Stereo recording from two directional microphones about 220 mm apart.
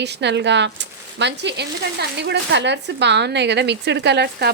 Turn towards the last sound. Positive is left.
turn(degrees=-50)  # may be behind; listen again after turning